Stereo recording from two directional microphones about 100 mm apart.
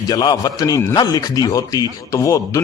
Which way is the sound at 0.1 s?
40° left (ahead or behind).